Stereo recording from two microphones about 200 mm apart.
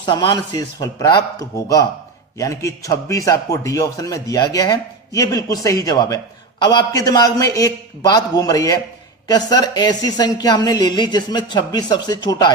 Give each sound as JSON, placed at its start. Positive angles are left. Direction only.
{"t": 0.0, "sound": "speech", "side_deg": 25}